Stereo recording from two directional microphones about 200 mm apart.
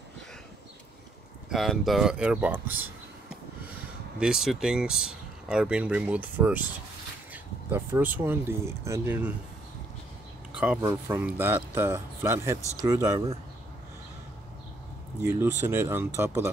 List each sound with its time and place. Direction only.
1.5 s speech: centre (ahead or behind)
4.2 s speech: 5° right (ahead or behind)
7.7 s speech: 10° right (ahead or behind)
10.6 s speech: 10° right (ahead or behind)
15.2 s speech: 10° right (ahead or behind)